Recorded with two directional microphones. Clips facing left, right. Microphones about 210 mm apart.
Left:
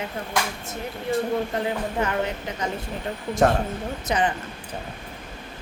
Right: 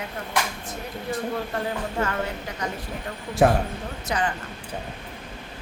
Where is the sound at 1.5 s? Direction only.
20° left (ahead or behind).